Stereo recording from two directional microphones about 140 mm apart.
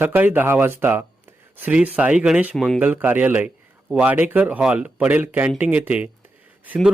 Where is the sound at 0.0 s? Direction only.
15° right (ahead or behind).